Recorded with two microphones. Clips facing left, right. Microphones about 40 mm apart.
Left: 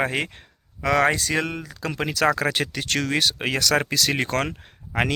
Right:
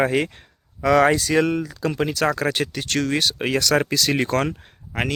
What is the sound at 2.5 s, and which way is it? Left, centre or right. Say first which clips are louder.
Speech: right 1 dB; left.